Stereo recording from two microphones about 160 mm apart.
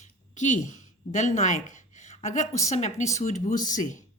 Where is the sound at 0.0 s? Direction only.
50° left (ahead or behind).